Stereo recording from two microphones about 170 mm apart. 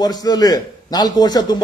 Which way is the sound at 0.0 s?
25° left (ahead or behind).